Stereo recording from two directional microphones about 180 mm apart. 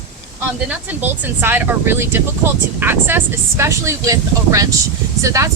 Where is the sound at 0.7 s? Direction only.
10° right (ahead or behind).